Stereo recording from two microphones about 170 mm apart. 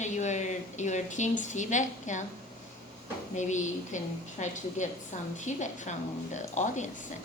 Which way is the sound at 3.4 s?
45° left (ahead or behind).